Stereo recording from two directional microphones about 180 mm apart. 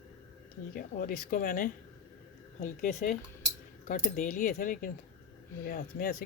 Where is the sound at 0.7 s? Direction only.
50° left (ahead or behind).